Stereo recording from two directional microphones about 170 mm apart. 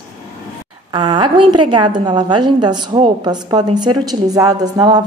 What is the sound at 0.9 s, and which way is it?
A woman's voice, 30° right (ahead or behind).